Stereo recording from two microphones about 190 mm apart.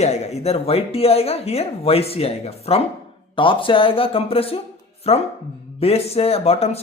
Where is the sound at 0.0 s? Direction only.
35° left (ahead or behind).